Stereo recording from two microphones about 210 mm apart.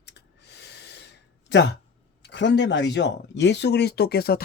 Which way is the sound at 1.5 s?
55° left (ahead or behind).